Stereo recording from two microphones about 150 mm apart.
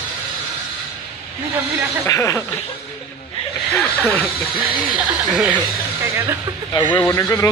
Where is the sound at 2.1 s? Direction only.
20° left (ahead or behind).